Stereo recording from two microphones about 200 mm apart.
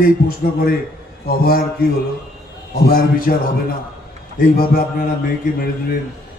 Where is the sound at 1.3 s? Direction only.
45° left (ahead or behind).